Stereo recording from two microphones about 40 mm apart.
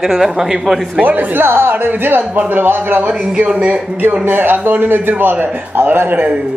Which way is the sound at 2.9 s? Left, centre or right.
Right.